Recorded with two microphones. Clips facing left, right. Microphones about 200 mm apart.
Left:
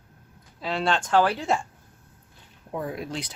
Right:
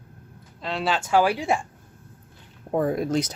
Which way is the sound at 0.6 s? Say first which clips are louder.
Even; centre (ahead or behind).